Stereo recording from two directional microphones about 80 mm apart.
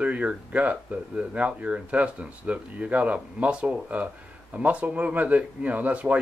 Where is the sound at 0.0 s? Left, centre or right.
Centre.